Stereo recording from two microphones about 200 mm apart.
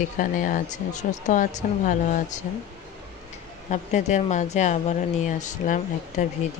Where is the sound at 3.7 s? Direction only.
35° left (ahead or behind).